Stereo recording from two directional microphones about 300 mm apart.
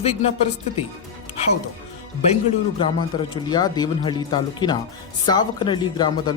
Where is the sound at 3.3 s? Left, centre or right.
Centre.